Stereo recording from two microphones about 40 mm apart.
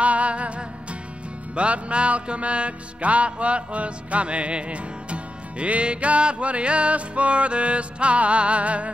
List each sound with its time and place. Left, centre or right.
0.0 s music: right